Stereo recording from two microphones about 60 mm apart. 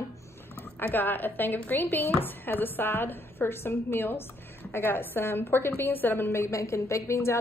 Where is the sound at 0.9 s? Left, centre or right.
Left.